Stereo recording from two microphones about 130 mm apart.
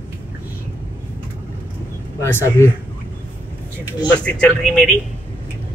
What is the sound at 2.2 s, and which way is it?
Speech, 20° left (ahead or behind).